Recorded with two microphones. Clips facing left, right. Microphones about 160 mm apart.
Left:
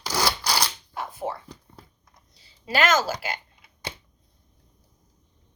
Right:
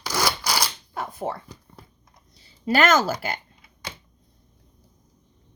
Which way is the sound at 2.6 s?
50° right (ahead or behind).